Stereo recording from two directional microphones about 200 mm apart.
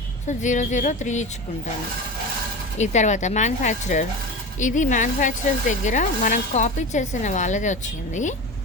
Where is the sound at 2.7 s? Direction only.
35° left (ahead or behind).